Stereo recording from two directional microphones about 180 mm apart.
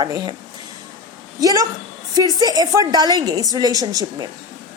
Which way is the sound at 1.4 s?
20° right (ahead or behind).